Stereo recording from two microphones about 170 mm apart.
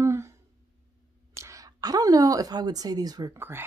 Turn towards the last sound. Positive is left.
turn(degrees=-15)  # may be behind; listen again after turning